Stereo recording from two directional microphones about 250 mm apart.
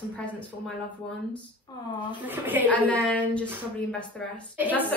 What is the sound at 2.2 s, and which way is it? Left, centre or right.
Speech, centre.